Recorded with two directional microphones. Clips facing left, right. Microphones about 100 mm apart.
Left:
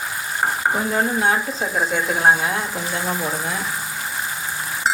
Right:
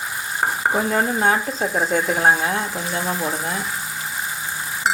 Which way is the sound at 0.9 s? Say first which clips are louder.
Right 1 dB; 45° right (ahead or behind).